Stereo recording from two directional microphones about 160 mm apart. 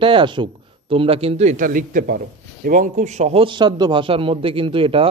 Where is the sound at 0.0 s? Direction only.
30° right (ahead or behind).